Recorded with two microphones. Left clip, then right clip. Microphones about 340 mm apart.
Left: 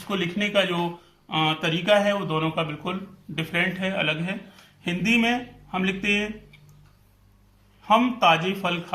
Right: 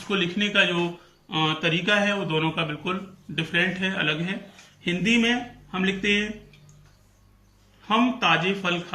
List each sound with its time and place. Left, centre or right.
0.1 s speech: centre
7.9 s speech: centre